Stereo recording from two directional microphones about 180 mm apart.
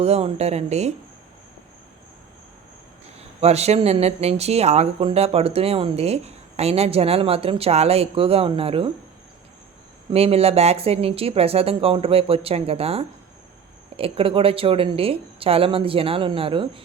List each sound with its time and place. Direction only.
0.0 s speech: 35° right (ahead or behind)
3.4 s speech: 35° right (ahead or behind)
10.1 s speech: 35° right (ahead or behind)